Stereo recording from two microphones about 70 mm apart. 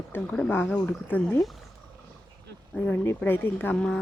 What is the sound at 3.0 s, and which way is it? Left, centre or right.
Speech, left.